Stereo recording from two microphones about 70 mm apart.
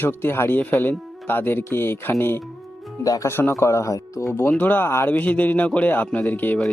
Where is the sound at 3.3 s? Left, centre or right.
Left.